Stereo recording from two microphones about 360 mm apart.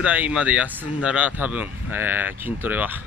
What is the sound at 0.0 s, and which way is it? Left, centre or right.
Speech, centre.